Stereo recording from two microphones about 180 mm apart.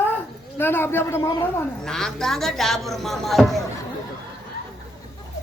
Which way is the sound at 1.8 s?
5° left (ahead or behind).